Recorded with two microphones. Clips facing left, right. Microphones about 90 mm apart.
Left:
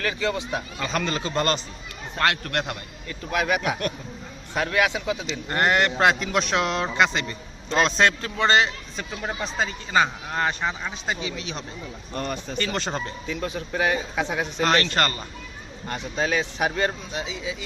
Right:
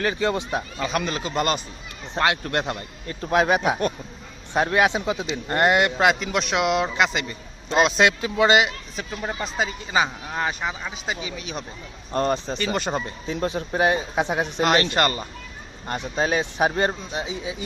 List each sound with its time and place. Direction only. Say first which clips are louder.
0.0 s speech: right 3 dB; 25° right (ahead or behind)
0.8 s speech: even; 5° right (ahead or behind)
3.1 s speech: right 5 dB; 35° right (ahead or behind); by 5.9 s 20° right (ahead or behind)
6.0 s a man's voice: even; 5° right (ahead or behind)
12.1 s speech: right 7 dB; 30° right (ahead or behind)
12.5 s speech: right 2 dB; 15° right (ahead or behind)
13.2 s speech: right 4 dB; 30° right (ahead or behind)